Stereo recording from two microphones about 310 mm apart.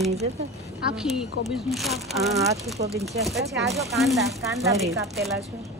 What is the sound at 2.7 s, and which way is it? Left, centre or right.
Speech, right.